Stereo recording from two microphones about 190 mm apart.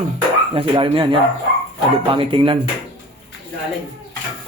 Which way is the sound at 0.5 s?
30° right (ahead or behind).